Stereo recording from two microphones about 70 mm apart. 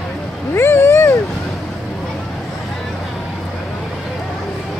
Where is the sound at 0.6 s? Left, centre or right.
Left.